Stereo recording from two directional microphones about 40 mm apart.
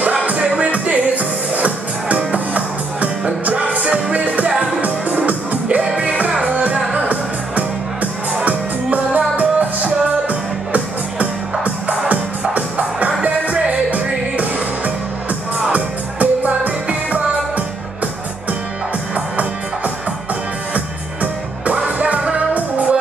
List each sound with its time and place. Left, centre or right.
0.0 s music: right
5.8 s music: right
6.4 s music: right
15.7 s music: right